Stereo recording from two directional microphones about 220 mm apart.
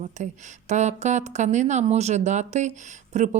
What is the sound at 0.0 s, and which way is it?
Speech, 30° right (ahead or behind).